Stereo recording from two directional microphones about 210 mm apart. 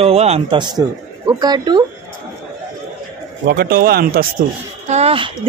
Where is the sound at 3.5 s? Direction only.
45° right (ahead or behind).